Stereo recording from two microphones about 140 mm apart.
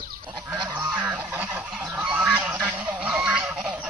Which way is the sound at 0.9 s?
10° right (ahead or behind).